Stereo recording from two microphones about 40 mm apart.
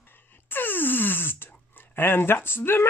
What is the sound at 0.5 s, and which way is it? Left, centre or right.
Speech, left.